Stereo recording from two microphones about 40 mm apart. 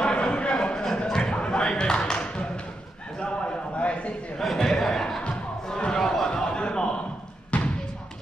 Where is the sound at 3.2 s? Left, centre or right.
Left.